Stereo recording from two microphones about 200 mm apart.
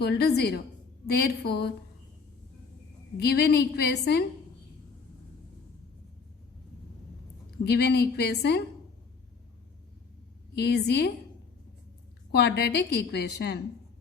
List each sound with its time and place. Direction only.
0.0 s a woman's voice: 55° left (ahead or behind)
3.2 s a woman's voice: 55° left (ahead or behind)
7.6 s a woman's voice: 55° left (ahead or behind)
10.5 s a woman's voice: 55° left (ahead or behind)
12.3 s a woman's voice: 55° left (ahead or behind)